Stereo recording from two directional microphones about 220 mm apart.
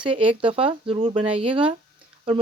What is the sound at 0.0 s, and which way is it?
Speech, 25° right (ahead or behind).